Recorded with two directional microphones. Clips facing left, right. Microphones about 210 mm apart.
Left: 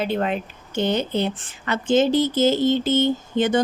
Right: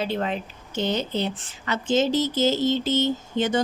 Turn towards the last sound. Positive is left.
turn(degrees=55)  # may be behind; listen again after turning